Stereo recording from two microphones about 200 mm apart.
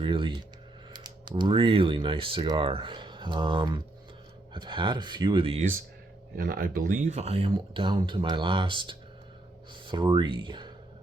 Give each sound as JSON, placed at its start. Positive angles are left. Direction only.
{"t": 0.0, "sound": "speech", "side_deg": -25}
{"t": 6.3, "sound": "speech", "side_deg": -50}